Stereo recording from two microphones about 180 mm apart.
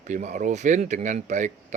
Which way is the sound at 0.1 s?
40° right (ahead or behind).